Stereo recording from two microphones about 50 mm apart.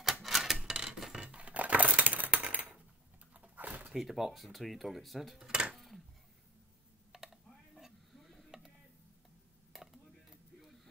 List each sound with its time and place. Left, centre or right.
0.0 s a sound: centre
1.2 s crushing: right
3.3 s dog: right
3.9 s speech: centre
5.5 s dishes: right
7.1 s mechanisms: centre
9.7 s a sound: centre